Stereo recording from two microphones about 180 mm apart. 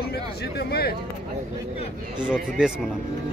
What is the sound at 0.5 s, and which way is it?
Speech, 60° left (ahead or behind).